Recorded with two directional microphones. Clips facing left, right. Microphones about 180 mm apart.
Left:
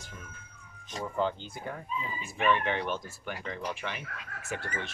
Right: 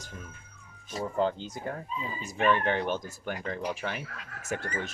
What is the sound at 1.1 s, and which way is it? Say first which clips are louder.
Speech: right 2 dB; 35° right (ahead or behind).